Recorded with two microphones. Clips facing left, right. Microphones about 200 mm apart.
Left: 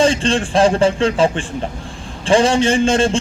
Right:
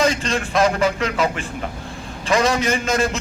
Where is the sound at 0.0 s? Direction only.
30° left (ahead or behind).